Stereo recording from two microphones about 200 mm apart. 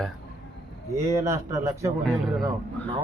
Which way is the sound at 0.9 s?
15° right (ahead or behind).